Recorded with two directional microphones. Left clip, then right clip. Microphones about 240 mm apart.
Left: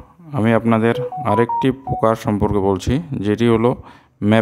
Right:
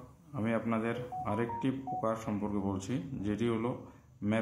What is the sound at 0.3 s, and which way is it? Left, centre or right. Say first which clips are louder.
Speech: left 17 dB; left.